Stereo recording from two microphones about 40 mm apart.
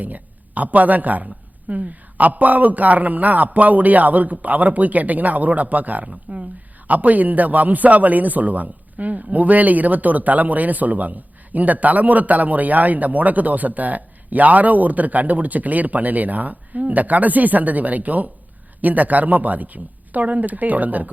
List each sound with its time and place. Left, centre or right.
0.0 s a man's voice: right
6.3 s a man's voice: right